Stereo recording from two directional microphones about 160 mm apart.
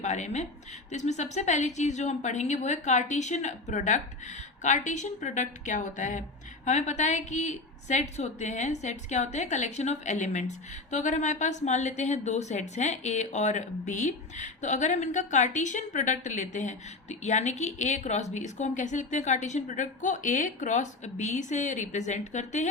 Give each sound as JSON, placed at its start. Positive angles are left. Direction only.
{"t": 0.0, "sound": "speech", "side_deg": 45}